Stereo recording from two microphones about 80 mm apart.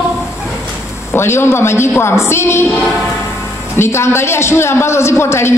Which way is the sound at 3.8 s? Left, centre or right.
Left.